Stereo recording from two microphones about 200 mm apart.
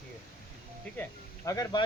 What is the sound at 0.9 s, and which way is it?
Speech, 5° left (ahead or behind).